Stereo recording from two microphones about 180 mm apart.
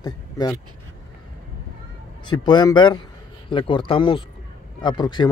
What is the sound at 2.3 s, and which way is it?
Speech, 25° left (ahead or behind).